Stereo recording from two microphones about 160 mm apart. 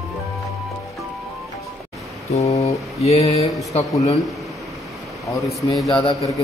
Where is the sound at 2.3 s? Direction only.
45° left (ahead or behind).